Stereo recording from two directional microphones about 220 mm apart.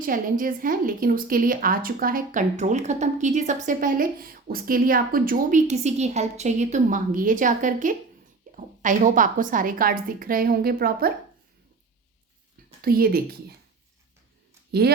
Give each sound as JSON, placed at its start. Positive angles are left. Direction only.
{"t": 0.0, "sound": "a woman's voice", "side_deg": -40}
{"t": 12.8, "sound": "a woman's voice", "side_deg": -45}
{"t": 14.7, "sound": "speech", "side_deg": -45}